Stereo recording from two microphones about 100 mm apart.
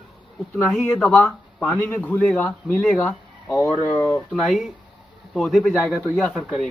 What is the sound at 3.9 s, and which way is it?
Speech, 30° left (ahead or behind).